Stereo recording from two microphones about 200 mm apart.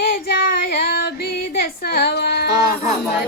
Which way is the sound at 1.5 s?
50° left (ahead or behind).